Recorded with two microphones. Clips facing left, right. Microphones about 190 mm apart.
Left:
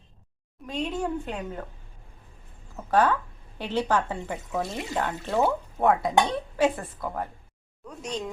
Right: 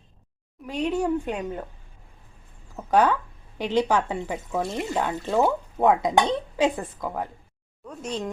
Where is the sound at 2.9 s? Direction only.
15° right (ahead or behind).